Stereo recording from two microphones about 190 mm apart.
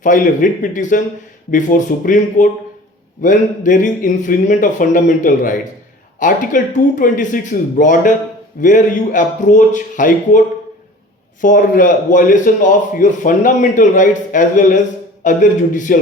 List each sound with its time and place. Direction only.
0.0 s a man's voice: 45° left (ahead or behind)